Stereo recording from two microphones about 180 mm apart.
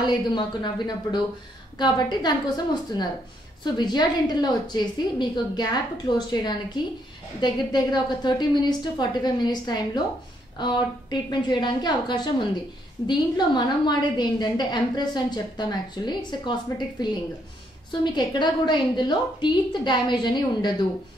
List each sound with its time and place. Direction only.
0.0 s a woman's voice: 25° left (ahead or behind)